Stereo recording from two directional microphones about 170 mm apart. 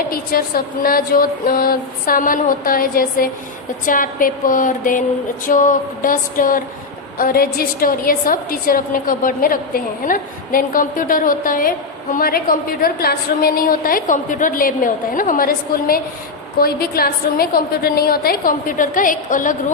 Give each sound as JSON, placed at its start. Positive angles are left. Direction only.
{"t": 0.1, "sound": "a woman's voice", "side_deg": 60}
{"t": 3.8, "sound": "a sound", "side_deg": 55}
{"t": 7.2, "sound": "a woman's voice", "side_deg": 60}